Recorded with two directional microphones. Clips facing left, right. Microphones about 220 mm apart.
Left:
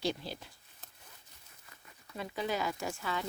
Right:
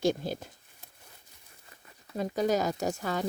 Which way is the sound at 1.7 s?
35° right (ahead or behind).